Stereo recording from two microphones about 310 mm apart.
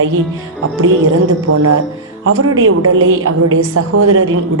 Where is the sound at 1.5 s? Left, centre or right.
Right.